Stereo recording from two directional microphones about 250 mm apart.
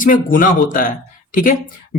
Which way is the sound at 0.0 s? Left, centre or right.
Left.